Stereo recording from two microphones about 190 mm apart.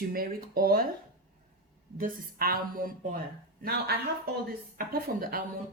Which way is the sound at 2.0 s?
50° right (ahead or behind).